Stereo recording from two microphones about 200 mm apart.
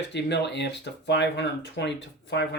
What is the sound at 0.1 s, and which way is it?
Speech, 60° left (ahead or behind).